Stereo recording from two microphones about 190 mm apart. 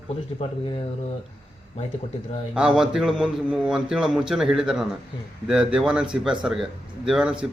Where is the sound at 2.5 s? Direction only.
5° right (ahead or behind).